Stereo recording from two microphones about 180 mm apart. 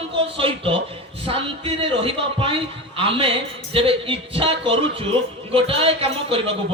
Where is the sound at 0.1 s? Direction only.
30° right (ahead or behind).